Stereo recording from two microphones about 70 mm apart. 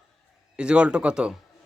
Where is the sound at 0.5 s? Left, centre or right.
Centre.